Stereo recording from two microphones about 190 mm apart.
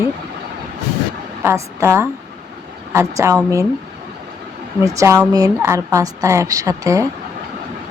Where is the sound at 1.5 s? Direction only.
15° right (ahead or behind).